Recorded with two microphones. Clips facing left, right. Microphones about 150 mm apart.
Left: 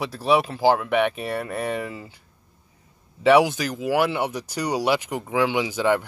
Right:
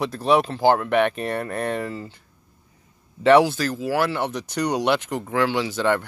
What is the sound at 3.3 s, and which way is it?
Speech, 10° left (ahead or behind).